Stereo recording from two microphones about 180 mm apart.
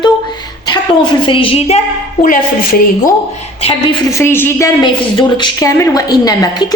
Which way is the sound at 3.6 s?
30° left (ahead or behind).